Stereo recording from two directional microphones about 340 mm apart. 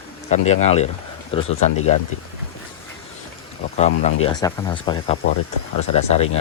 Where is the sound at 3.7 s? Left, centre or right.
Left.